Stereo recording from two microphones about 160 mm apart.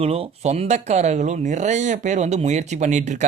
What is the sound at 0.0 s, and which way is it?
Speech, 40° right (ahead or behind).